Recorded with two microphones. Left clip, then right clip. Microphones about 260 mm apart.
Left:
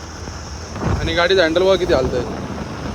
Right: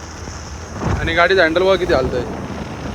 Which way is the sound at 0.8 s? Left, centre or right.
Centre.